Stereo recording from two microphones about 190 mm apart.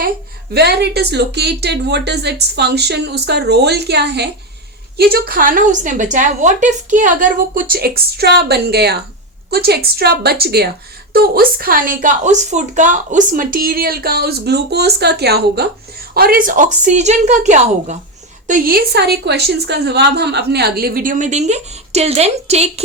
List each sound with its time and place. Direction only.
0.5 s a woman's voice: 60° right (ahead or behind); by 22.8 s 35° right (ahead or behind)